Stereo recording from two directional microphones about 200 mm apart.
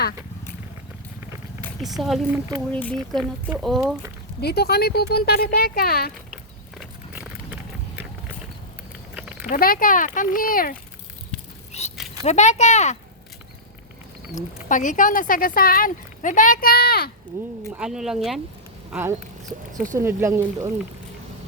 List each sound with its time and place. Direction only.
1.8 s speech: centre (ahead or behind)
4.4 s speech: 55° left (ahead or behind)
6.3 s horse: 5° right (ahead or behind)
9.1 s a sound: 5° right (ahead or behind)
9.5 s speech: 45° left (ahead or behind)
12.2 s speech: 35° left (ahead or behind)
14.7 s speech: 40° left (ahead or behind)
17.7 s speech: 5° right (ahead or behind)